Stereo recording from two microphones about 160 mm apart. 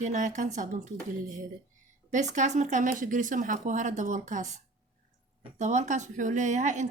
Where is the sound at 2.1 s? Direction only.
50° right (ahead or behind).